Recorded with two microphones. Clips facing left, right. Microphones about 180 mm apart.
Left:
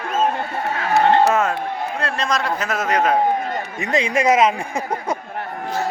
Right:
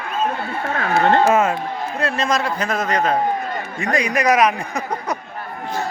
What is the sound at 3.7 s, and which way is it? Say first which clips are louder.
Speech: even; 20° left (ahead or behind).